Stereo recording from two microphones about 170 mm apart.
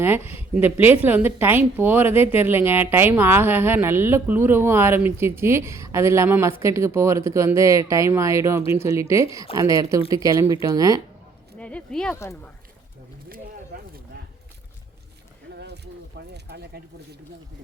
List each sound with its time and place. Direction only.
0.2 s speech: 35° left (ahead or behind)
0.5 s a woman's voice: 10° right (ahead or behind)
11.5 s speech: 5° left (ahead or behind)
12.2 s speech: 15° left (ahead or behind)
15.5 s a sound: 80° right